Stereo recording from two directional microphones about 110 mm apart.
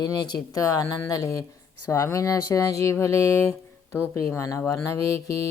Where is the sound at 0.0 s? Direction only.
40° left (ahead or behind).